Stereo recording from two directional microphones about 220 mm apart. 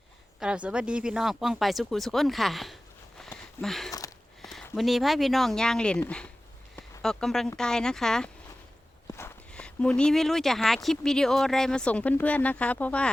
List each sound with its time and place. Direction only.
0.3 s speech: 5° right (ahead or behind)
3.2 s a sound: centre (ahead or behind)
4.4 s speech: centre (ahead or behind)